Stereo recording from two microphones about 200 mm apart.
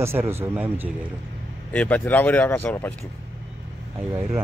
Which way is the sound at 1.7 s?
10° left (ahead or behind).